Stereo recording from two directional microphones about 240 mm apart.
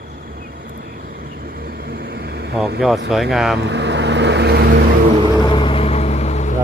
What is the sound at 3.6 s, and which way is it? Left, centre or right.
Vehicle, right.